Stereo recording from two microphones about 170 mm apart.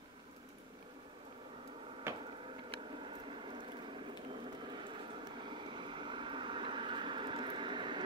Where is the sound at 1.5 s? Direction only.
30° right (ahead or behind).